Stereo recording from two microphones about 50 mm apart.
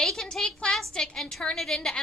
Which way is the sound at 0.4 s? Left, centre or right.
Centre.